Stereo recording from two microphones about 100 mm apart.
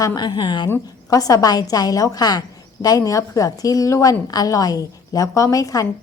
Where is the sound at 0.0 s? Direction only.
40° left (ahead or behind).